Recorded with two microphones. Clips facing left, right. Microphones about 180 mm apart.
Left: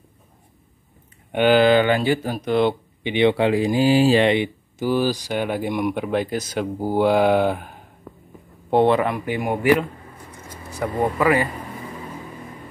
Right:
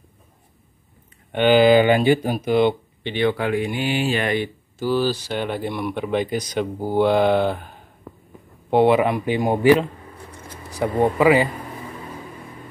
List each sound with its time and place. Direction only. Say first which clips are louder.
1.3 s speech: right 1 dB; centre (ahead or behind); by 2.4 s 15° right (ahead or behind)
2.4 s speech: even; centre (ahead or behind)
3.0 s speech: left 5 dB; 15° left (ahead or behind)
8.6 s speech: right 1 dB; 5° right (ahead or behind)